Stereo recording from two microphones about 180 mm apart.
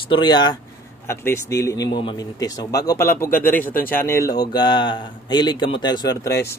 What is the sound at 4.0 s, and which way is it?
A man's voice, 15° left (ahead or behind).